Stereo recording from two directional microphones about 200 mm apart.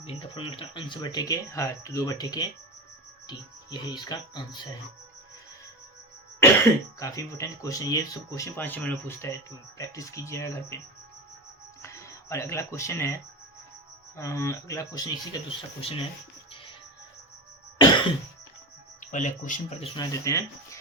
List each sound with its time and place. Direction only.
0.0 s speech: 25° left (ahead or behind)
7.0 s speech: 15° left (ahead or behind)
11.8 s speech: 15° left (ahead or behind)
14.2 s speech: 15° left (ahead or behind)
18.9 s speech: 40° left (ahead or behind)
20.0 s speech: 15° left (ahead or behind)